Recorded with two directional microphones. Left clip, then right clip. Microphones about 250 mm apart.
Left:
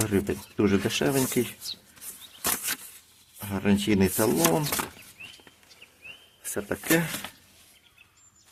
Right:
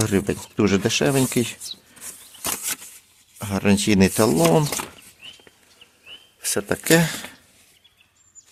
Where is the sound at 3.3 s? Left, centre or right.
Right.